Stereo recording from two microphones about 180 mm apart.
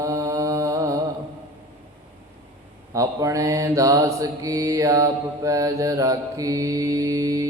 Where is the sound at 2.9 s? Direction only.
20° right (ahead or behind).